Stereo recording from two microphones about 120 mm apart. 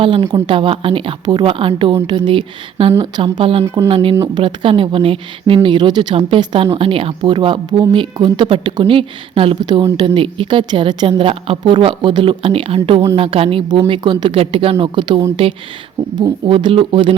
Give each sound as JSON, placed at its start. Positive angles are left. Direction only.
{"t": 0.0, "sound": "a woman's voice", "side_deg": -45}
{"t": 14.3, "sound": "a woman's voice", "side_deg": -50}